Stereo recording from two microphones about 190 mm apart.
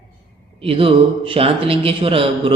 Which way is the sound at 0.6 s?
30° right (ahead or behind).